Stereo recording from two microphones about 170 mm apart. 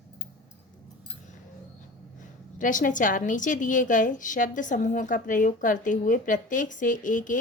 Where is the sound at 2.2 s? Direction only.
50° left (ahead or behind).